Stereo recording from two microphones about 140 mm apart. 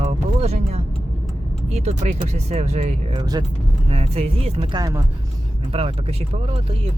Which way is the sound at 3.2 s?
30° right (ahead or behind).